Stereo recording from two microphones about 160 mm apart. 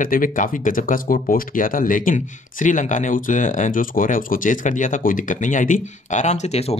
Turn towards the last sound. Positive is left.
turn(degrees=40)  # may be behind; listen again after turning